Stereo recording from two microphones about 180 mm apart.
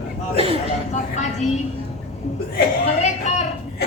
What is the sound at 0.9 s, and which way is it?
Speech, 40° left (ahead or behind).